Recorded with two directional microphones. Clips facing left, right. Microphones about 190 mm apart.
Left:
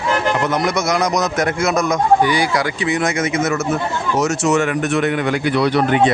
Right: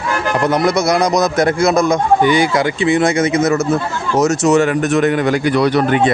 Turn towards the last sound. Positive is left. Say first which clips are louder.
# right 2 dB
turn(degrees=-45)  # may be behind; listen again after turning